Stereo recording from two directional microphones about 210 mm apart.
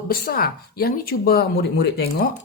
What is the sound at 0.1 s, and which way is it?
Speech, 45° left (ahead or behind).